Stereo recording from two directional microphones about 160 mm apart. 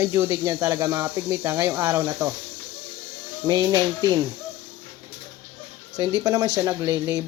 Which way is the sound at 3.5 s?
25° right (ahead or behind).